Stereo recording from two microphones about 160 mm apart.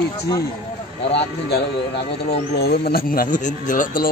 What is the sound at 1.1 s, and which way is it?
Speech, 90° left.